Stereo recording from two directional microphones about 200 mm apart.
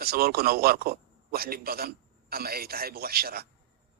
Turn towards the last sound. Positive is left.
turn(degrees=-50)  # may be behind; listen again after turning